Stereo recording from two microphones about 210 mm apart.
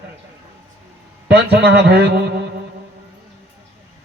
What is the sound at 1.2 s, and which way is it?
Speech, 50° right (ahead or behind).